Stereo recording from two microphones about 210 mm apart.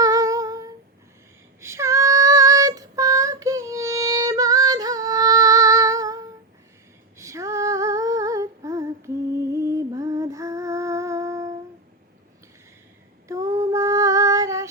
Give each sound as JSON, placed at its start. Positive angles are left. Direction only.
{"t": 0.0, "sound": "humming", "side_deg": -15}
{"t": 1.6, "sound": "child singing", "side_deg": -15}
{"t": 7.2, "sound": "female singing", "side_deg": -15}
{"t": 13.2, "sound": "child singing", "side_deg": -15}